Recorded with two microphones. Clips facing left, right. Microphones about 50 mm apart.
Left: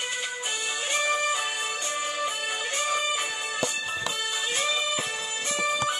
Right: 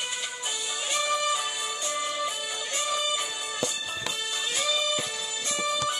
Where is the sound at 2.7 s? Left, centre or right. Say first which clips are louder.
Left 1 dB; left.